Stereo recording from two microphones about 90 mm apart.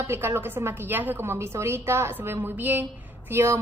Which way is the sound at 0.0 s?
30° right (ahead or behind).